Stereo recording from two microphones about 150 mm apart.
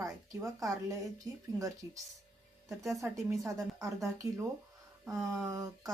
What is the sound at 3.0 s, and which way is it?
Speech, 20° right (ahead or behind).